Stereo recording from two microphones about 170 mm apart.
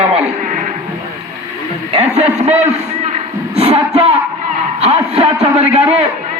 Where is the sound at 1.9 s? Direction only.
35° right (ahead or behind).